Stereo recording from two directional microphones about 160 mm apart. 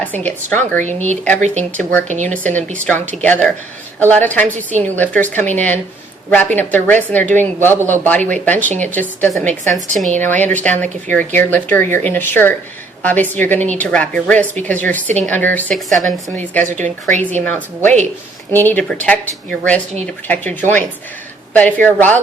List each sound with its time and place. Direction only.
0.0 s a woman's voice: 10° left (ahead or behind)
0.8 s speech: 45° right (ahead or behind)
1.8 s a woman's voice: 10° left (ahead or behind)
2.0 s speech: 50° right (ahead or behind)
2.8 s a woman's voice: 10° left (ahead or behind)
16.6 s speech: 50° right (ahead or behind)
17.4 s a woman's voice: 10° left (ahead or behind)